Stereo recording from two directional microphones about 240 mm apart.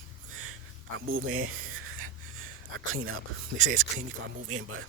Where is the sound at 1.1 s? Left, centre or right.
Right.